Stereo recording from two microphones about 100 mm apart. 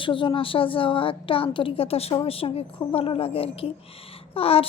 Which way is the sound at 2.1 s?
65° left (ahead or behind).